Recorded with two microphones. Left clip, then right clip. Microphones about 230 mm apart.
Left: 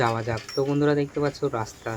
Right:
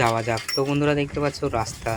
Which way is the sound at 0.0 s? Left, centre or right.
Right.